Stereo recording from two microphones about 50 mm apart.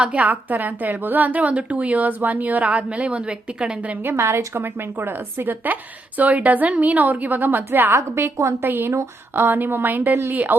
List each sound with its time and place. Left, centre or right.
0.0 s a woman's voice: right
4.2 s a woman's voice: right
7.9 s a woman's voice: right